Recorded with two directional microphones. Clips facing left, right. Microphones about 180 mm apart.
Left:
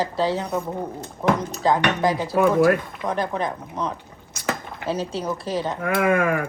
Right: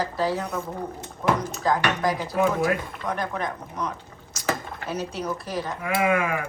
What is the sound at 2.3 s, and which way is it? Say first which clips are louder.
Speech: left 7 dB; 60° left (ahead or behind).